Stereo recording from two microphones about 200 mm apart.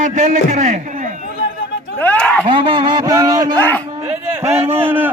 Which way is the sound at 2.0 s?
5° left (ahead or behind).